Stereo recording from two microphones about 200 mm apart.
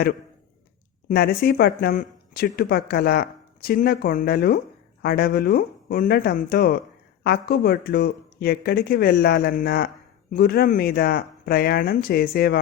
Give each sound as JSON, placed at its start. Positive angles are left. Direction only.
{"t": 1.0, "sound": "speech", "side_deg": 50}